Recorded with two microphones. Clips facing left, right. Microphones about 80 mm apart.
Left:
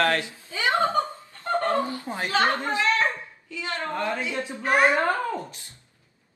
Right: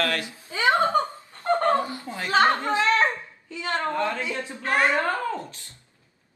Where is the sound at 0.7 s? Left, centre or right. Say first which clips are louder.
Right 2 dB; right.